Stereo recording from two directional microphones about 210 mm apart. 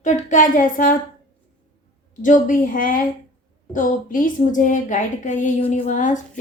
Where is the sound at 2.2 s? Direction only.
40° left (ahead or behind).